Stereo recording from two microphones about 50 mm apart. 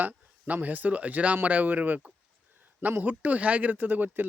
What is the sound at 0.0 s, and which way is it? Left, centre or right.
Speech, right.